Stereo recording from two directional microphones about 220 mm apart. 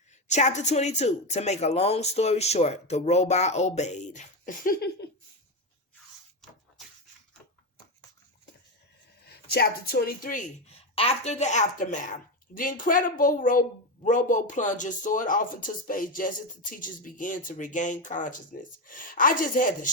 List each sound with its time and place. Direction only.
0.3 s speech: 30° left (ahead or behind)
9.2 s speech: 45° left (ahead or behind)